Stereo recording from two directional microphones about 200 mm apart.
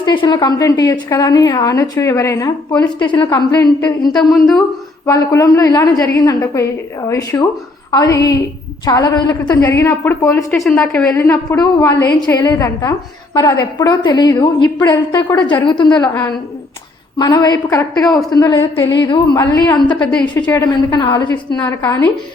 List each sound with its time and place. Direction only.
0.0 s a woman's voice: 25° left (ahead or behind)
4.1 s a woman's voice: centre (ahead or behind)
5.0 s a woman's voice: 15° left (ahead or behind)
11.2 s a woman's voice: 15° left (ahead or behind)
16.0 s a woman's voice: 10° left (ahead or behind)
17.2 s a woman's voice: 20° left (ahead or behind)
20.1 s a woman's voice: 5° left (ahead or behind)
21.0 s a woman's voice: 20° left (ahead or behind)